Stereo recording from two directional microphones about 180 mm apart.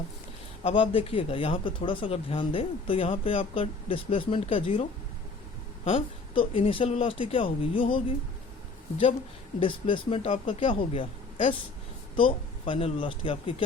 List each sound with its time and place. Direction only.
0.6 s speech: 30° left (ahead or behind)
9.6 s speech: 30° left (ahead or behind)
12.1 s speech: 30° left (ahead or behind)